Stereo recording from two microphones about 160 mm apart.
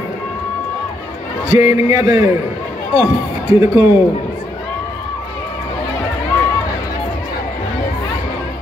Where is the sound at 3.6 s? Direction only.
15° right (ahead or behind).